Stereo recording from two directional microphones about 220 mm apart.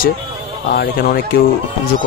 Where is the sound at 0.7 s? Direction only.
40° left (ahead or behind).